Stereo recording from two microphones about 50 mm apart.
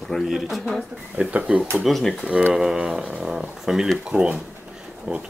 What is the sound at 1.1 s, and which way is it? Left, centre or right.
Speech, right.